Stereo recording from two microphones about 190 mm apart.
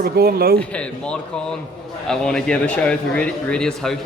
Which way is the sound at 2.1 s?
5° left (ahead or behind).